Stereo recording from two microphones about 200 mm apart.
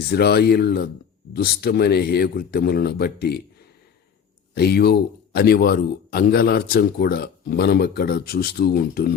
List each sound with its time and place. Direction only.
0.1 s speech: 55° left (ahead or behind)
4.5 s speech: 55° left (ahead or behind)